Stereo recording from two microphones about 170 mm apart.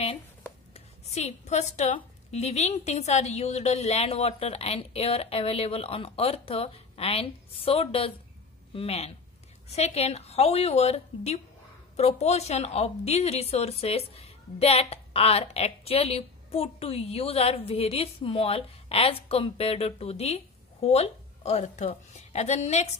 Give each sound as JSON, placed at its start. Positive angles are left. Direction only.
{"t": 0.7, "sound": "speech", "side_deg": 40}